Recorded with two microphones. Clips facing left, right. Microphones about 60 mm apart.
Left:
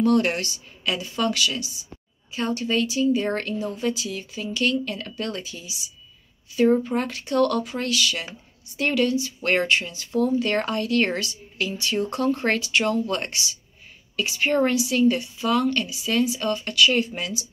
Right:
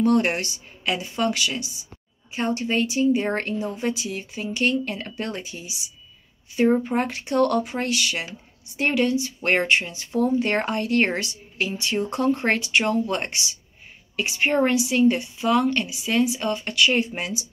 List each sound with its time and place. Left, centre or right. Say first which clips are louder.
0.0 s speech: even; right